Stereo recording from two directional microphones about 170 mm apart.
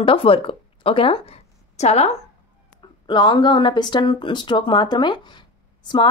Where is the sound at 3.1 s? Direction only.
30° left (ahead or behind).